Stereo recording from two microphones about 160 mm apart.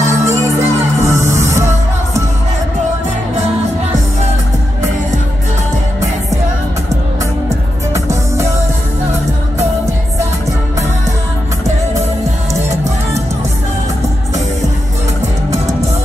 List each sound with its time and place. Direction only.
0.1 s music: 15° right (ahead or behind)
7.4 s music: 20° right (ahead or behind)